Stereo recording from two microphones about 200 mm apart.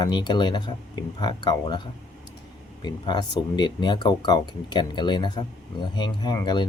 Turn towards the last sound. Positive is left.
turn(degrees=20)  # may be behind; listen again after turning